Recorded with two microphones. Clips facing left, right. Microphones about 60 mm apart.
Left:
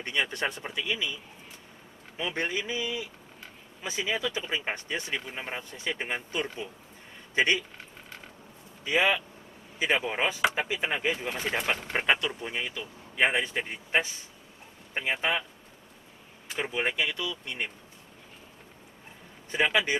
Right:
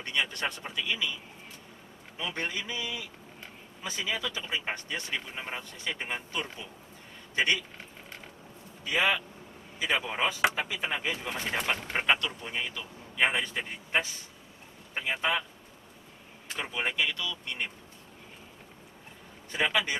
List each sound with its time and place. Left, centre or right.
0.0 s speech: left
2.1 s speech: left
5.2 s speech: centre
7.3 s speech: left
8.8 s speech: left
11.1 s speech: centre; by 15.3 s left
16.5 s speech: centre
19.5 s speech: centre